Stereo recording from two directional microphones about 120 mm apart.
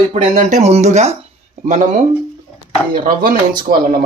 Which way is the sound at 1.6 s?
90° right.